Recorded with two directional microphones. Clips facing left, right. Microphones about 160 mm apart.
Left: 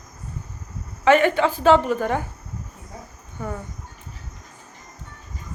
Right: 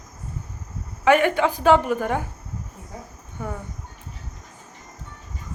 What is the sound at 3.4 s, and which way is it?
Speech, 10° right (ahead or behind).